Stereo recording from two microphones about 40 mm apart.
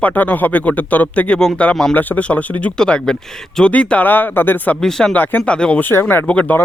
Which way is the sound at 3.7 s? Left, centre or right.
Left.